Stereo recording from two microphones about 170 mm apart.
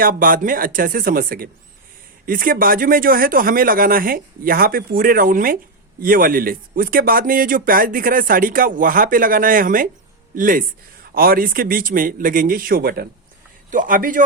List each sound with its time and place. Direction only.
0.0 s speech: 55° right (ahead or behind)
13.7 s speech: 50° right (ahead or behind)